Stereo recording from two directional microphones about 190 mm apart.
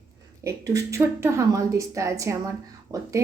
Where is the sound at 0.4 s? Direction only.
20° right (ahead or behind).